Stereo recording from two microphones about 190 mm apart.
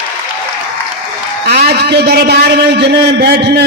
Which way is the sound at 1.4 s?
60° right (ahead or behind).